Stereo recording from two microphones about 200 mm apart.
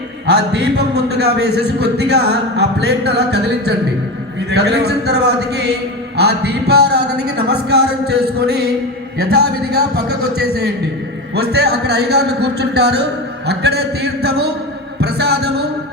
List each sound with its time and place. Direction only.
0.3 s a man's voice: 55° right (ahead or behind)